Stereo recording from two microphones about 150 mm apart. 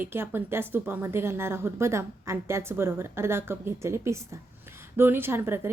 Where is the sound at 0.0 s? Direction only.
15° right (ahead or behind).